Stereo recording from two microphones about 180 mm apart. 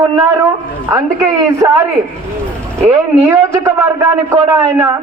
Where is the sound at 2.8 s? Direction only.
15° right (ahead or behind).